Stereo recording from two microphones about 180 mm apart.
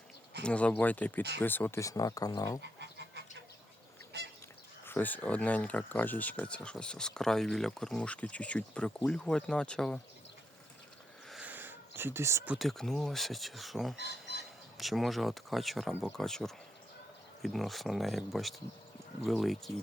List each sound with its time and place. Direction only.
0.4 s speech: 5° left (ahead or behind)
2.6 s a sound: 70° right (ahead or behind)
4.9 s speech: 10° left (ahead or behind)
11.3 s a sound: 5° right (ahead or behind)
12.5 s speech: centre (ahead or behind)
13.9 s speech: 65° left (ahead or behind)
14.8 s speech: centre (ahead or behind)